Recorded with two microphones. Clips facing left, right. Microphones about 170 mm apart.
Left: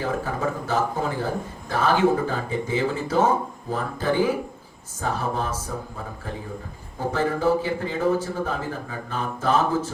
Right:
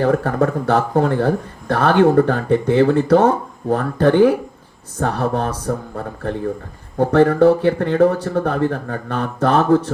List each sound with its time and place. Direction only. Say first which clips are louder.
0.0 s speech: right 9 dB; 65° right (ahead or behind)